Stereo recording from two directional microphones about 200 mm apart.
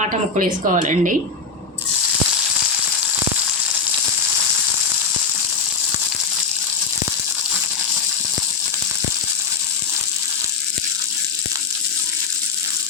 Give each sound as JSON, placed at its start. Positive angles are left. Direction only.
{"t": 0.0, "sound": "a woman's voice", "side_deg": -35}